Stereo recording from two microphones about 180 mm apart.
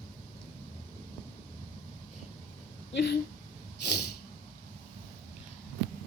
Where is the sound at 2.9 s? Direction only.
70° left (ahead or behind).